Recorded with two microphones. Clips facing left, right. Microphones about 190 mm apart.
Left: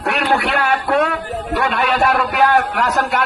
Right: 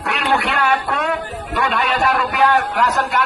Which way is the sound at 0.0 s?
55° left (ahead or behind).